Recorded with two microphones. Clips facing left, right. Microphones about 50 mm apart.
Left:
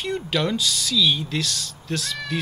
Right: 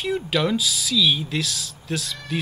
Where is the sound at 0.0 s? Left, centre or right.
Centre.